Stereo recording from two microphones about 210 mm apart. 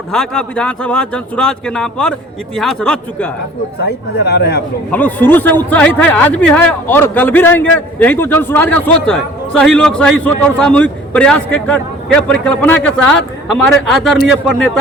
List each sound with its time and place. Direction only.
0.1 s speech: 5° left (ahead or behind)
3.8 s speech: 50° left (ahead or behind)
4.9 s a man's voice: 5° left (ahead or behind)